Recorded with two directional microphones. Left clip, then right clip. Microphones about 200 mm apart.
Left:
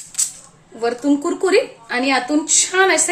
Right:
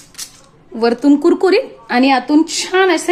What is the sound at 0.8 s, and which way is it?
Speech, 50° right (ahead or behind).